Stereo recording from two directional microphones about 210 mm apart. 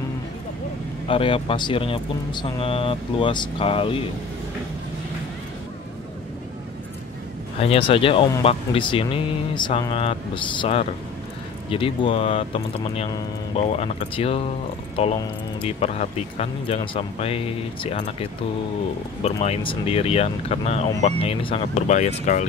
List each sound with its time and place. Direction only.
1.0 s speech: 25° left (ahead or behind)
7.6 s speech: 25° left (ahead or behind)